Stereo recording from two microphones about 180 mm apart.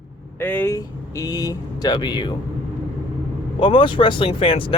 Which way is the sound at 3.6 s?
25° left (ahead or behind).